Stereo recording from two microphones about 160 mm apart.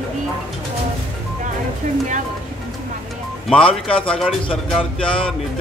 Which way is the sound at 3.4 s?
5° left (ahead or behind).